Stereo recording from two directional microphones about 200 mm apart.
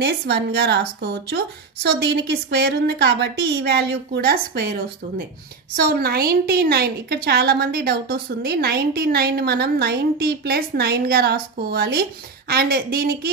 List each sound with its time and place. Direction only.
0.0 s a woman's voice: 55° right (ahead or behind)